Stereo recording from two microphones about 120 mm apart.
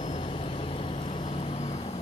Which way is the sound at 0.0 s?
50° left (ahead or behind).